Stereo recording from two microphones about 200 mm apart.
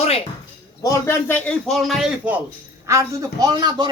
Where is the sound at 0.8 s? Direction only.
15° left (ahead or behind).